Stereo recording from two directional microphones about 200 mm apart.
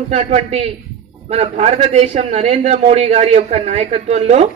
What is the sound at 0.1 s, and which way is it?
A woman's voice, 30° right (ahead or behind).